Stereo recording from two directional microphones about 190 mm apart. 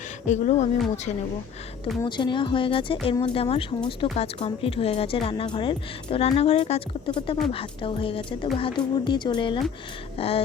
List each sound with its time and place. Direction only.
0.3 s speech: 40° left (ahead or behind)
2.0 s speech: 25° left (ahead or behind)